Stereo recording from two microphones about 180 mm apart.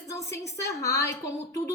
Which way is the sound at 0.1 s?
15° left (ahead or behind).